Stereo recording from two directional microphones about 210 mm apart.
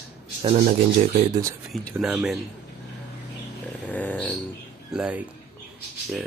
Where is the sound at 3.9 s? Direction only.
5° left (ahead or behind).